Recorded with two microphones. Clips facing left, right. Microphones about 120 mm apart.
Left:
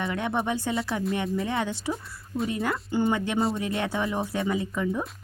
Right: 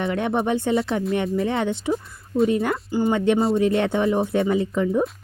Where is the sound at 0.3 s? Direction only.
20° right (ahead or behind).